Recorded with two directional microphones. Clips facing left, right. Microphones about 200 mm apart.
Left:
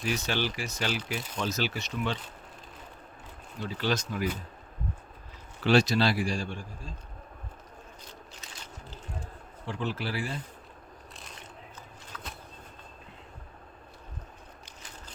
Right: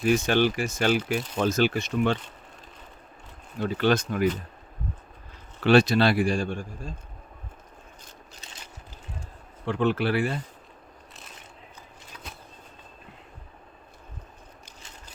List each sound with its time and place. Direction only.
0.0 s speech: 50° right (ahead or behind)
3.6 s a man's voice: 55° right (ahead or behind)
5.6 s a man's voice: 60° right (ahead or behind)
9.6 s a man's voice: 60° right (ahead or behind)
12.1 s a sound: 15° right (ahead or behind)